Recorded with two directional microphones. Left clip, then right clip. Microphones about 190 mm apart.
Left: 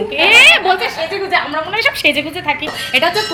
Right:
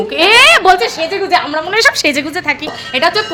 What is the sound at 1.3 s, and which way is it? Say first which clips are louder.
Speech: right 3 dB; 50° right (ahead or behind).